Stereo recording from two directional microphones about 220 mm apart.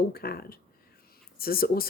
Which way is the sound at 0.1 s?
45° left (ahead or behind).